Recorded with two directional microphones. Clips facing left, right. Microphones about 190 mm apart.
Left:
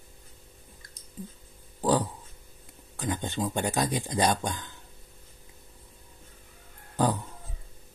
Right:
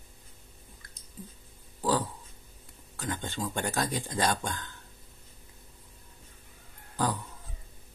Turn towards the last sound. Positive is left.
turn(degrees=20)  # may be behind; listen again after turning